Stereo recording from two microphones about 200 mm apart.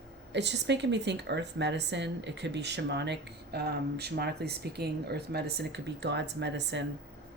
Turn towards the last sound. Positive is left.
turn(degrees=-60)  # may be behind; listen again after turning